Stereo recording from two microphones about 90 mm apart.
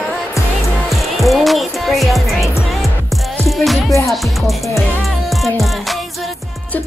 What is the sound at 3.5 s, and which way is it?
Music, centre (ahead or behind).